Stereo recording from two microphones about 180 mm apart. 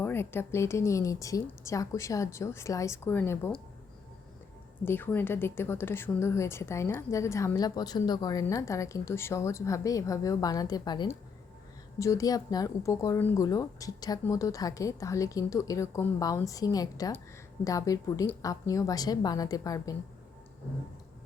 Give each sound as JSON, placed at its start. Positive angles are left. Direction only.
{"t": 0.0, "sound": "a woman's voice", "side_deg": 10}
{"t": 4.9, "sound": "a woman's voice", "side_deg": 10}